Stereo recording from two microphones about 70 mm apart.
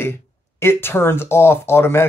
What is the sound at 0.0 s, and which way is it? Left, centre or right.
Speech, left.